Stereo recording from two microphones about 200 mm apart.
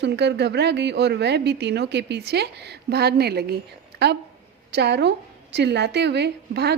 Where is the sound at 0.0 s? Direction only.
55° right (ahead or behind).